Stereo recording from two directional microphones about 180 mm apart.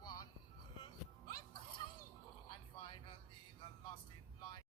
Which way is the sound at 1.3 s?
25° left (ahead or behind).